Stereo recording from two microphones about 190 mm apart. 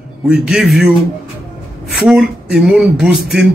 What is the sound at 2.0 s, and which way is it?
A man's voice, 5° right (ahead or behind).